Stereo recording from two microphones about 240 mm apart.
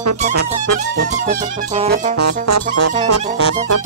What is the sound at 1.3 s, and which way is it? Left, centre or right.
Music, right.